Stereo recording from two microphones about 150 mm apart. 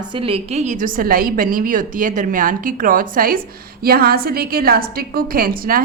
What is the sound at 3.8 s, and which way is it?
A woman's voice, 90° right.